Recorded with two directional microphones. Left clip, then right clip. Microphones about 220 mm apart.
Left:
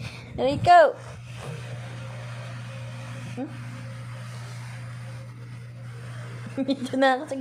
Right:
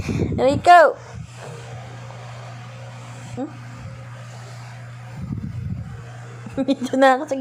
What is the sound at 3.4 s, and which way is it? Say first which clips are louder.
Speech: right 5 dB; 10° right (ahead or behind).